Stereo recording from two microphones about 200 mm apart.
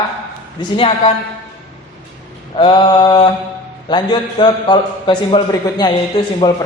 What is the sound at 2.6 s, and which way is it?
A man's voice, 25° left (ahead or behind).